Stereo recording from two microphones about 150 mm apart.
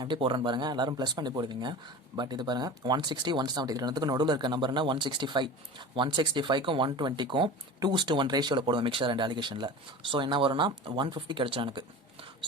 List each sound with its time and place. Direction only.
0.0 s speech: 30° right (ahead or behind)